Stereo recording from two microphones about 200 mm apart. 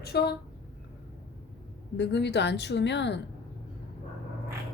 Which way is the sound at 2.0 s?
60° left (ahead or behind).